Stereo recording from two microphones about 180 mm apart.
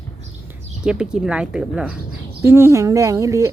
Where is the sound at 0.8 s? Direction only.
5° right (ahead or behind).